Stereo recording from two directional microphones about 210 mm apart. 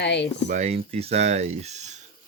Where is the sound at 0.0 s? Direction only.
55° left (ahead or behind).